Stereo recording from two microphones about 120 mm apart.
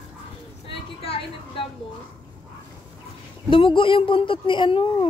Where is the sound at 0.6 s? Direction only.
50° left (ahead or behind).